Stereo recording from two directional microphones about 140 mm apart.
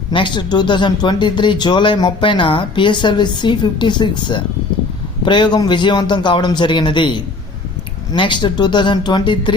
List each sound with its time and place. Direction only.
0.1 s speech: 35° left (ahead or behind)